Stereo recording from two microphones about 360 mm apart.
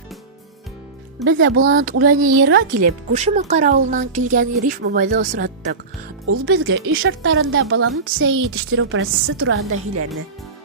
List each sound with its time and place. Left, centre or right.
1.2 s speech: right
1.8 s speech: right
2.8 s speech: centre
6.2 s speech: right